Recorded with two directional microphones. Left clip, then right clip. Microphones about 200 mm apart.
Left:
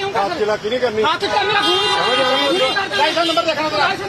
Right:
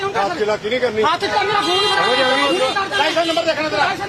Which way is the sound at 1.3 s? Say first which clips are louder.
Left 1 dB; 10° left (ahead or behind).